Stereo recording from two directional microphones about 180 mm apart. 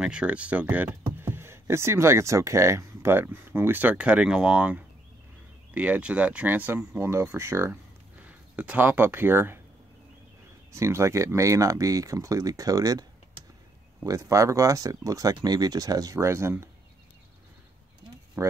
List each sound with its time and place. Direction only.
0.0 s speech: 5° right (ahead or behind)
10.7 s speech: 15° right (ahead or behind)
14.0 s speech: 20° right (ahead or behind)
18.4 s speech: 15° right (ahead or behind)